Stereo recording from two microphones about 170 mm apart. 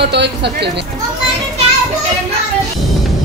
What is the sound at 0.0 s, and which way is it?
Speech, 85° right.